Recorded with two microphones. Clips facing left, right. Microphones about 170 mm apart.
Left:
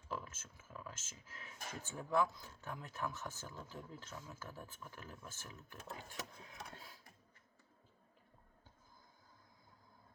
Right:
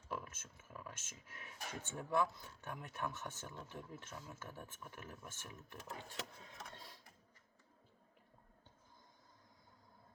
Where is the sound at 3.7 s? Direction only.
25° right (ahead or behind).